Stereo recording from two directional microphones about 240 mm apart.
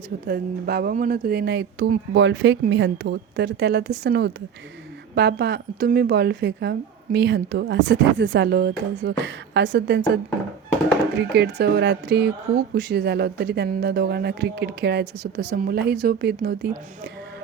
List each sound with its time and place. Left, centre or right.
0.3 s speech: right
11.2 s speech: right